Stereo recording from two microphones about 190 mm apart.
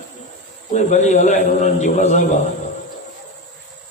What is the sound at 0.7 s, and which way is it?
A man's voice, 40° left (ahead or behind).